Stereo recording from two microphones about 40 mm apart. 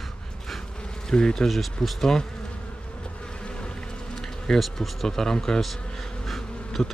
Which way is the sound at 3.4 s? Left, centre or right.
Left.